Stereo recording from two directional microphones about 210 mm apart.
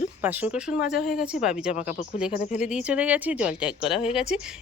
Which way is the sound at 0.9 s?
45° left (ahead or behind).